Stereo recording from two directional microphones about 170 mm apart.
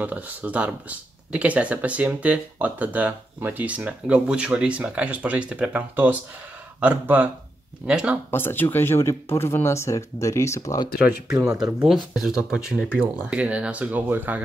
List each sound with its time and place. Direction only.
0.0 s speech: 10° right (ahead or behind)
8.3 s speech: 15° left (ahead or behind)
11.0 s speech: 5° right (ahead or behind)
12.4 s speech: 5° right (ahead or behind)
12.9 s speech: 10° left (ahead or behind)
13.3 s speech: 5° right (ahead or behind)